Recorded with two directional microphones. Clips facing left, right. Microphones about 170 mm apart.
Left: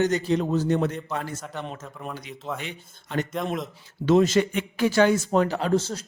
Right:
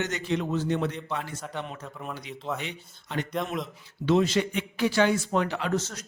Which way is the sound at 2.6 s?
50° left (ahead or behind).